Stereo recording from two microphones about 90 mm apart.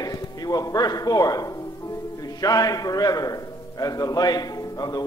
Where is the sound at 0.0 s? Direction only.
45° left (ahead or behind).